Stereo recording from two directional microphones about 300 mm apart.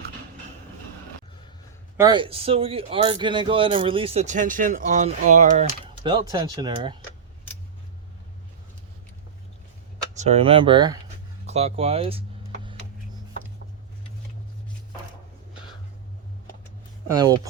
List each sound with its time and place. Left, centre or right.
2.0 s speech: centre
10.2 s speech: right
15.5 s a sound: centre
17.2 s speech: centre